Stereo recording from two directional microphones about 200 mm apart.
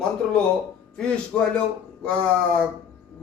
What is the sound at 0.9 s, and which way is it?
A man's voice, 5° left (ahead or behind).